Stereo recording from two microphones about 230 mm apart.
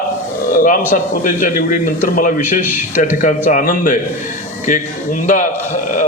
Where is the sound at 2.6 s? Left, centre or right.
Centre.